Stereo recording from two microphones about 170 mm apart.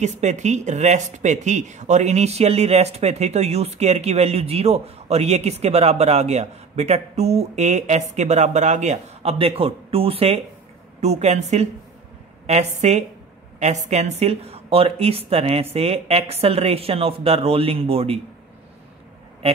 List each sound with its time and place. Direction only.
0.0 s speech: 45° right (ahead or behind)